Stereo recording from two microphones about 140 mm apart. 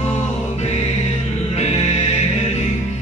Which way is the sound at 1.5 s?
50° left (ahead or behind).